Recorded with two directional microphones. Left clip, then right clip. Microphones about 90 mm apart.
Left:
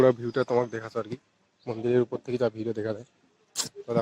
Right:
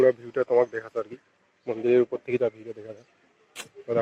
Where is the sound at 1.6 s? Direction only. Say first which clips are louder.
Right 4 dB; 40° left (ahead or behind).